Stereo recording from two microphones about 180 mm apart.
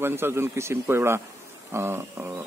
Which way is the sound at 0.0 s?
15° right (ahead or behind).